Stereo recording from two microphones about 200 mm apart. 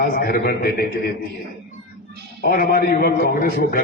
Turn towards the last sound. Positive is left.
turn(degrees=50)  # may be behind; listen again after turning